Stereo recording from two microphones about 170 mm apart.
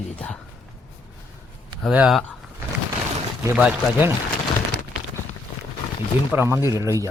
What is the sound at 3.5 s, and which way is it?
Speech, 10° right (ahead or behind).